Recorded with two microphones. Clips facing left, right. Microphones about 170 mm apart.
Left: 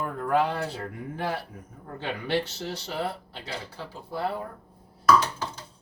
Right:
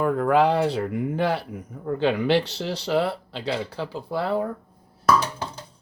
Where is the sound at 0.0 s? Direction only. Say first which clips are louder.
Right 6 dB; 90° right.